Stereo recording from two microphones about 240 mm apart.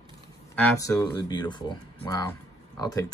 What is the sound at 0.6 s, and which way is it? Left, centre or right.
Speech, centre.